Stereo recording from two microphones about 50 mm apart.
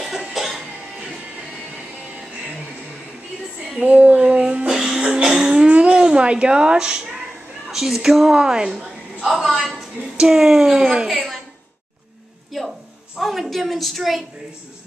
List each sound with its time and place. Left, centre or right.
0.1 s cough: centre
3.8 s music: right; by 5.0 s centre
5.2 s a sound: centre
7.7 s a woman's voice: centre
9.2 s a woman's voice: centre
12.6 s a sound: centre
13.2 s a woman's voice: centre